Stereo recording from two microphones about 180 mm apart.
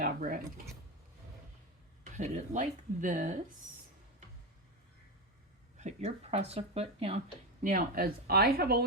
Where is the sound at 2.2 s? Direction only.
40° right (ahead or behind).